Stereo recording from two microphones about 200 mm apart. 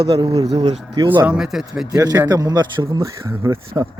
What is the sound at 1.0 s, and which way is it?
Speech, 20° right (ahead or behind).